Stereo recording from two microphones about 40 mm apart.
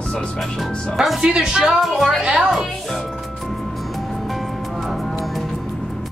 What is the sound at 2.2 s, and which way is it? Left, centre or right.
Speech, right.